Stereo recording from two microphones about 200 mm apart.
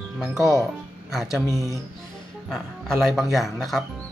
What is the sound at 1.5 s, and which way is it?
Speech, 15° left (ahead or behind).